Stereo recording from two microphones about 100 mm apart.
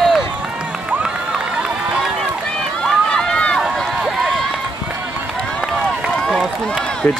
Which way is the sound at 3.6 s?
5° right (ahead or behind).